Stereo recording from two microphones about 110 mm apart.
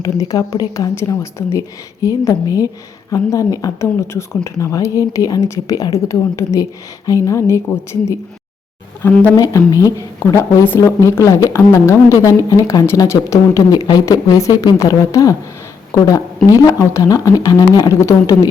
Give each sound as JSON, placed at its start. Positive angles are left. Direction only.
{"t": 0.0, "sound": "a woman's voice", "side_deg": 35}
{"t": 9.0, "sound": "speech", "side_deg": 20}
{"t": 9.4, "sound": "a woman's voice", "side_deg": 30}
{"t": 14.0, "sound": "a woman's voice", "side_deg": 25}